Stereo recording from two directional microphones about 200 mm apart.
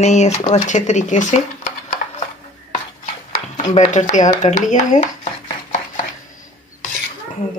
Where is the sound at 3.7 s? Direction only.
35° left (ahead or behind).